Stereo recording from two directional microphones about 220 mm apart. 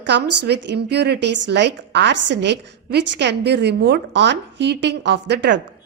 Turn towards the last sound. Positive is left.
turn(degrees=-50)  # may be behind; listen again after turning